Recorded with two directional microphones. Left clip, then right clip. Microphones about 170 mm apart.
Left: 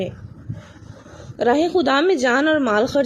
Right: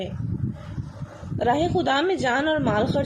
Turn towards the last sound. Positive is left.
turn(degrees=60)  # may be behind; listen again after turning